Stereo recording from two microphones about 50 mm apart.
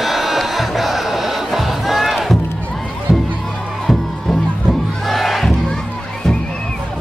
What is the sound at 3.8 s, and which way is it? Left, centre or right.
Crowd, centre.